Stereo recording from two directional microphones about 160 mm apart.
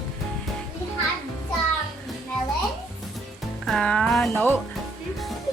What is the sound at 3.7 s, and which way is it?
Speech, 5° left (ahead or behind).